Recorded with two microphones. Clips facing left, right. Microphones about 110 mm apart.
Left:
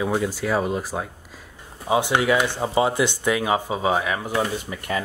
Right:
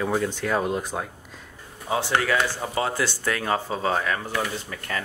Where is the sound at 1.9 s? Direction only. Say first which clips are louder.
Left 4 dB; 15° left (ahead or behind).